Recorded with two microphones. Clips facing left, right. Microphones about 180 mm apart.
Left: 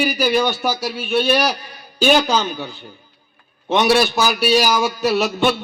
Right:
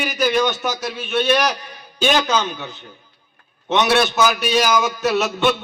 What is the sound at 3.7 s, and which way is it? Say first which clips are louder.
Speech: left 2 dB; 10° left (ahead or behind).